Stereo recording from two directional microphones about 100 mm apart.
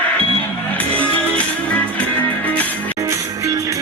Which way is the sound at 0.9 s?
15° left (ahead or behind).